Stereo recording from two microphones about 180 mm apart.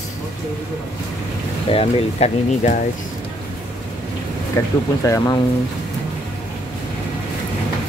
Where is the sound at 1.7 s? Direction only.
35° left (ahead or behind).